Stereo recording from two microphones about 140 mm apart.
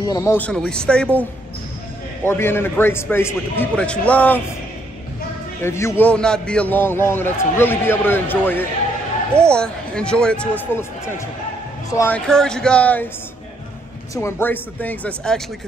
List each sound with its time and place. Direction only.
0.0 s speech: 20° left (ahead or behind)
0.5 s a man's voice: 5° left (ahead or behind)
2.2 s a man's voice: 15° left (ahead or behind)
5.6 s a man's voice: 20° left (ahead or behind)
12.3 s a man's voice: 5° left (ahead or behind)
14.1 s a man's voice: 15° left (ahead or behind)